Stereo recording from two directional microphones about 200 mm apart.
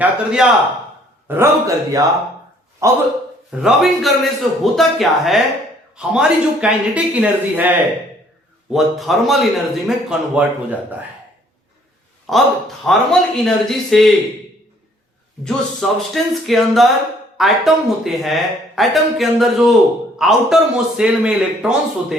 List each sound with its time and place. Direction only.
0.0 s speech: 5° right (ahead or behind)
1.3 s speech: 15° right (ahead or behind)
3.5 s speech: centre (ahead or behind)
12.3 s speech: centre (ahead or behind)
15.4 s speech: centre (ahead or behind)